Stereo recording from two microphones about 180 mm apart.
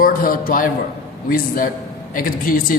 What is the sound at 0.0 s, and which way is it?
A man's voice, 50° left (ahead or behind).